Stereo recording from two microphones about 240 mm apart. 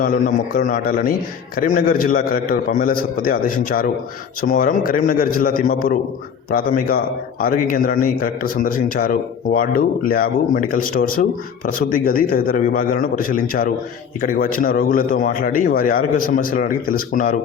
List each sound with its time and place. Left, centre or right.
0.0 s a man's voice: left